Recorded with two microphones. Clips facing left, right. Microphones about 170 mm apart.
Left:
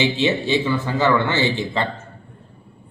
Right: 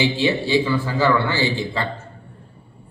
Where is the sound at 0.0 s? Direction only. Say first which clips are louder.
Even; 20° left (ahead or behind).